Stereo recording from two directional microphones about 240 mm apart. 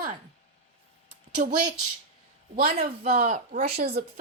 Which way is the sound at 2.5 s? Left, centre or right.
Right.